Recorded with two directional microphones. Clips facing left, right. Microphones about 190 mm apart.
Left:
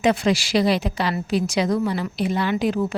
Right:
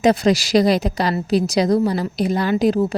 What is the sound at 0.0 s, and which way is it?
A woman's voice, 40° right (ahead or behind).